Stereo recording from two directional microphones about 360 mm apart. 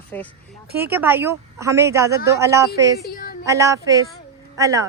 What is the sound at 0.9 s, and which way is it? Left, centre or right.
A woman's voice, centre.